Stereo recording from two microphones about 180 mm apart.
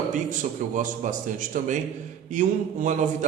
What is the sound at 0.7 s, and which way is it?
A man's voice, 45° right (ahead or behind).